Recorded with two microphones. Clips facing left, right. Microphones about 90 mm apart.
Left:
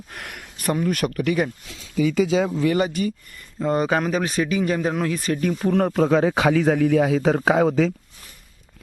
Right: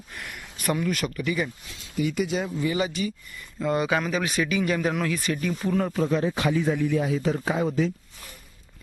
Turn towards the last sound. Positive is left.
turn(degrees=90)